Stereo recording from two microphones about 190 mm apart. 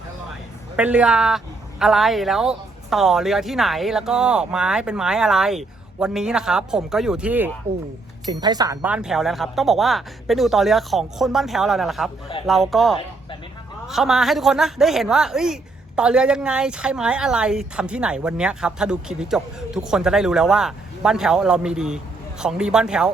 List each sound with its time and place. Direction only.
0.8 s speech: 5° right (ahead or behind)
8.3 s speech: 20° right (ahead or behind)
8.8 s speech: 5° right (ahead or behind)